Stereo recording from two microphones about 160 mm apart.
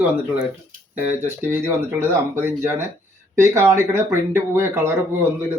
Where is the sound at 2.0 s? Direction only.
15° right (ahead or behind).